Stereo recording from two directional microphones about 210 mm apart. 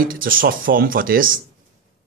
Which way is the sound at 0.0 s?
40° right (ahead or behind).